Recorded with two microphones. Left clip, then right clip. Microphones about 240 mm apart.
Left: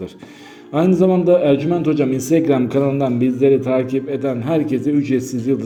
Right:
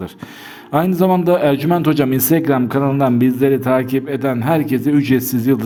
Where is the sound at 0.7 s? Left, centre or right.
Right.